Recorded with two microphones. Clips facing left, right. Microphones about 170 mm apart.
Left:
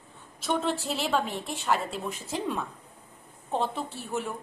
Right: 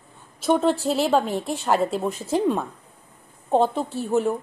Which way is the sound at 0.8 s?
35° right (ahead or behind).